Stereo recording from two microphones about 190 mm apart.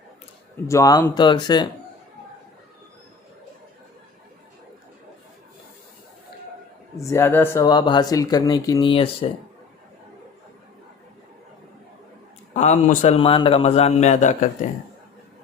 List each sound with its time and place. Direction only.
0.7 s speech: 20° left (ahead or behind)
7.0 s speech: 15° left (ahead or behind)
12.5 s a man's voice: 35° left (ahead or behind)